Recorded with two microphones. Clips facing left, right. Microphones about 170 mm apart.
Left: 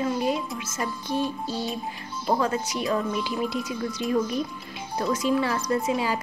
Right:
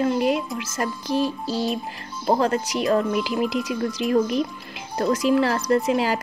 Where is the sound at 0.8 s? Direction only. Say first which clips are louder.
Right 4 dB; 90° right.